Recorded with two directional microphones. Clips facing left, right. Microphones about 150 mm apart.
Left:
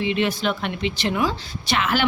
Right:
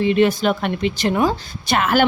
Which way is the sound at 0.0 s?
45° right (ahead or behind).